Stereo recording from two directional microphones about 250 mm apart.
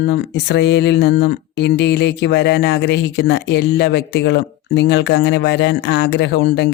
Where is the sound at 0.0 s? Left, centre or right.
Left.